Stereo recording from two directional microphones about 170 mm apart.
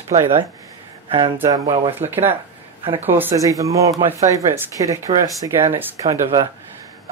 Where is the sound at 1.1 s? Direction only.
25° right (ahead or behind).